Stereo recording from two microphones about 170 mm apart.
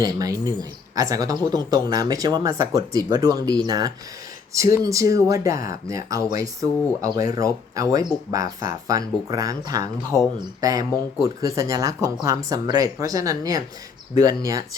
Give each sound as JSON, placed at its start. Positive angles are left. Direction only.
{"t": 0.0, "sound": "speech", "side_deg": -20}
{"t": 10.1, "sound": "speech", "side_deg": 0}
{"t": 10.6, "sound": "speech", "side_deg": -20}